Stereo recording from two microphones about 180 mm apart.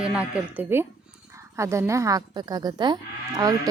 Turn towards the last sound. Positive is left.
turn(degrees=-20)  # may be behind; listen again after turning